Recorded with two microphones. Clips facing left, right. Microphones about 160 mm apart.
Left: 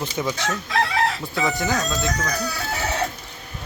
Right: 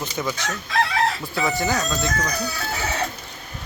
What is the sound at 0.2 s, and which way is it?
Speech, 15° left (ahead or behind).